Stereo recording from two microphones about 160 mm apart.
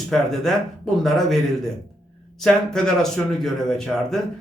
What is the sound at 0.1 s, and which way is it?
Speech, centre (ahead or behind).